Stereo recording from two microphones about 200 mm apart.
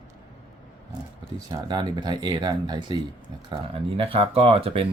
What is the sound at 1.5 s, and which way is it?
Speech, 20° right (ahead or behind).